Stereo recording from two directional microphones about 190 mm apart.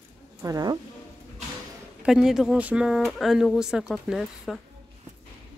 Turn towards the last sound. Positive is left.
turn(degrees=0)  # may be behind; listen again after turning